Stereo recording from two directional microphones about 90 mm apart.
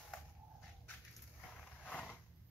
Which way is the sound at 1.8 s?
10° left (ahead or behind).